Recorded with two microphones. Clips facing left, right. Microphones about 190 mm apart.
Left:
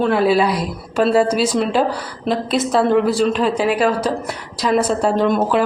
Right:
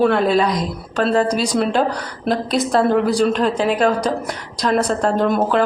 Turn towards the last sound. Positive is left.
turn(degrees=0)  # may be behind; listen again after turning